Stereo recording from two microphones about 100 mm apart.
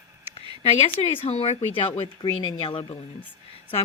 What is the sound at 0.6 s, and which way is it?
A woman's voice, 90° left.